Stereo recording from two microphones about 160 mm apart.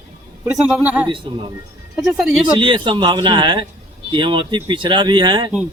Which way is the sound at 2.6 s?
30° right (ahead or behind).